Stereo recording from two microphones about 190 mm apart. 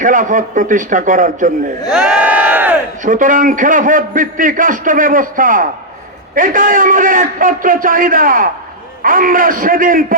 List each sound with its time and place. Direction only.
0.0 s a man's voice: 45° right (ahead or behind)
1.9 s crowd: 5° right (ahead or behind)
3.0 s a man's voice: 40° right (ahead or behind)